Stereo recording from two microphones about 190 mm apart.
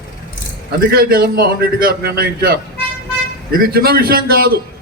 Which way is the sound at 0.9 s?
50° right (ahead or behind).